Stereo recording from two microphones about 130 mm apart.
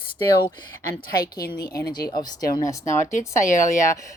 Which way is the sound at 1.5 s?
30° left (ahead or behind).